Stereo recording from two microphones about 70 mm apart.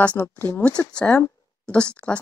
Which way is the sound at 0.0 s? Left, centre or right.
Left.